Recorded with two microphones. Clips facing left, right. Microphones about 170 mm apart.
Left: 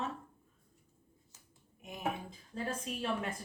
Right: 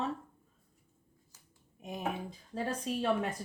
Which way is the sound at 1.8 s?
35° right (ahead or behind).